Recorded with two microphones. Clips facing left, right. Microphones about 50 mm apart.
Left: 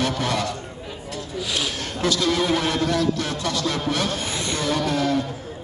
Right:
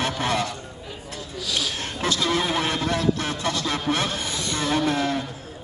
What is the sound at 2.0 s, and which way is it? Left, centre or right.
A man's voice, right.